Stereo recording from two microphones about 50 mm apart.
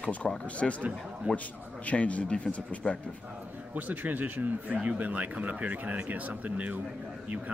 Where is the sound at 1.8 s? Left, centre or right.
Left.